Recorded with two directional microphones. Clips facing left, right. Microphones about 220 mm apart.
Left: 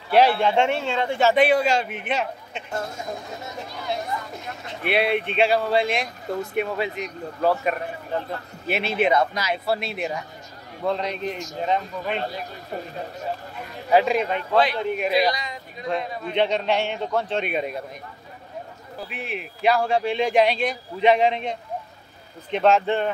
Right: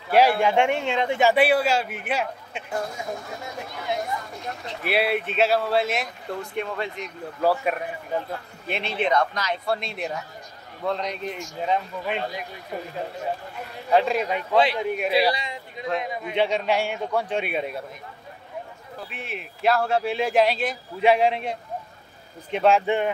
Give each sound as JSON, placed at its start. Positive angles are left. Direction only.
{"t": 0.1, "sound": "a man's voice", "side_deg": -10}
{"t": 4.8, "sound": "speech", "side_deg": -5}
{"t": 7.4, "sound": "speech", "side_deg": -5}
{"t": 8.6, "sound": "speech", "side_deg": 5}
{"t": 11.2, "sound": "speech", "side_deg": 40}
{"t": 11.6, "sound": "speech", "side_deg": 0}
{"t": 13.8, "sound": "a man's voice", "side_deg": 5}
{"t": 15.3, "sound": "a man's voice", "side_deg": -25}
{"t": 16.0, "sound": "a man's voice", "side_deg": -15}
{"t": 18.9, "sound": "a man's voice", "side_deg": 0}